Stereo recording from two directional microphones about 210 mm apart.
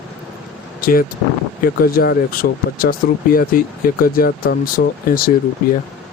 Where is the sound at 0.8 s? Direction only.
45° left (ahead or behind).